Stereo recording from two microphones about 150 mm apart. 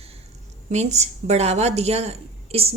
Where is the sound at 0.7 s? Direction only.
50° right (ahead or behind).